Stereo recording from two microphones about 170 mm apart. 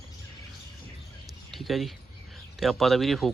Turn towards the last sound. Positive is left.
turn(degrees=0)  # may be behind; listen again after turning